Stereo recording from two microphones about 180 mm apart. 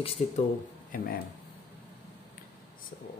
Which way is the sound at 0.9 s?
50° left (ahead or behind).